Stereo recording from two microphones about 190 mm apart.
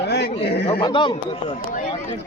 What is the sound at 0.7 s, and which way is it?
Speech, 25° left (ahead or behind).